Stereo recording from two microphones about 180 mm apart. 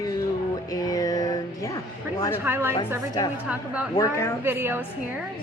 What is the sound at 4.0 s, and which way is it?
Speech, 15° left (ahead or behind).